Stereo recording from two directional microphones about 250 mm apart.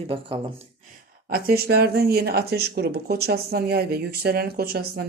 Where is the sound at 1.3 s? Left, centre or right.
Right.